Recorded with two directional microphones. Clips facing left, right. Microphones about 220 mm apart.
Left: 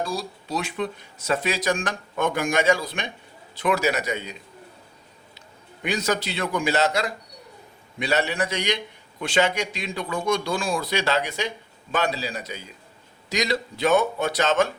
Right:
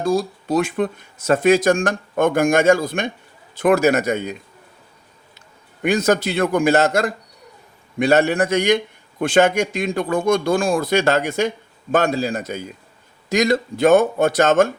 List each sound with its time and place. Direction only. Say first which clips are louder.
0.0 s speech: right 9 dB; 50° right (ahead or behind)
5.8 s speech: right 8 dB; 50° right (ahead or behind)